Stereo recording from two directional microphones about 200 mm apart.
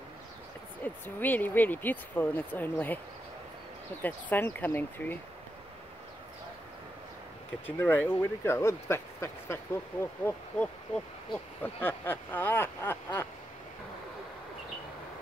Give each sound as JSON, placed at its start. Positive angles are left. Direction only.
{"t": 0.8, "sound": "speech", "side_deg": 10}
{"t": 4.0, "sound": "speech", "side_deg": 10}
{"t": 7.6, "sound": "speech", "side_deg": 10}